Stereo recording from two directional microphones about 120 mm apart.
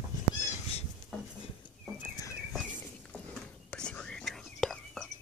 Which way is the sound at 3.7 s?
10° left (ahead or behind).